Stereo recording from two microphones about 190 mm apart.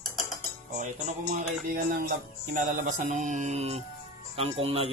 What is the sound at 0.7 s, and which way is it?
Music, 40° right (ahead or behind).